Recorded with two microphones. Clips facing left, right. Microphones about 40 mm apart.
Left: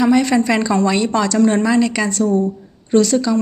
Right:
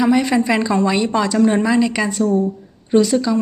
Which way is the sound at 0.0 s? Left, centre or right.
Centre.